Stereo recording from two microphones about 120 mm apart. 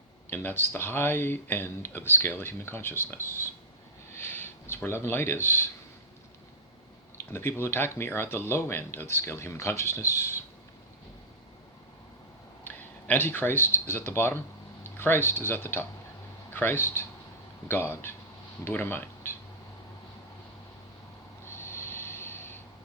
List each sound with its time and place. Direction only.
0.3 s speech: 20° left (ahead or behind)
4.1 s a sound: 20° left (ahead or behind)
4.7 s speech: 20° left (ahead or behind)
7.3 s speech: 20° left (ahead or behind)
12.6 s speech: 15° left (ahead or behind)
21.4 s snort: 20° left (ahead or behind)